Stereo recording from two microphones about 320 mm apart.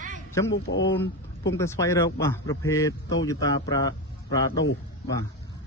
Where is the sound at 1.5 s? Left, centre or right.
Centre.